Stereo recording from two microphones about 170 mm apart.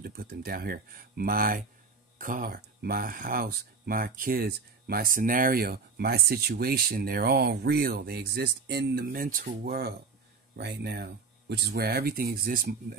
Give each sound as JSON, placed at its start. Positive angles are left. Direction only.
{"t": 0.0, "sound": "speech", "side_deg": -65}
{"t": 10.5, "sound": "speech", "side_deg": -80}